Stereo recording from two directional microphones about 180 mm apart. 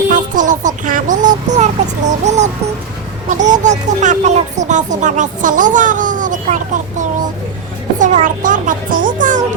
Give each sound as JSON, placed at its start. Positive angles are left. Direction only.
{"t": 0.1, "sound": "a sound", "side_deg": -45}
{"t": 3.2, "sound": "speech", "side_deg": -40}
{"t": 7.9, "sound": "speech", "side_deg": -45}